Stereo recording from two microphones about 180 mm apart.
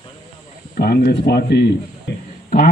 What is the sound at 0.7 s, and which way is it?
Speech, 60° left (ahead or behind).